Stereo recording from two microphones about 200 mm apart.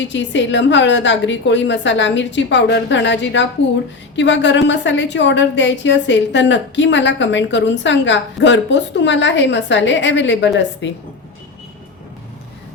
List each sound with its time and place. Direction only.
0.0 s a woman's voice: 65° left (ahead or behind)